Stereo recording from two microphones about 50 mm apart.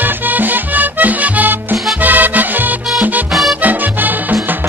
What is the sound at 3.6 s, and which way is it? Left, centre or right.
Music, right.